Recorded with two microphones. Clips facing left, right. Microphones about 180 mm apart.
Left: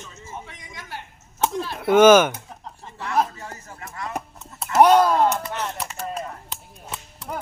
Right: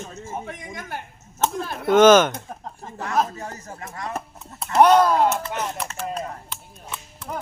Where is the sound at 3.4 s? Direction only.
40° right (ahead or behind).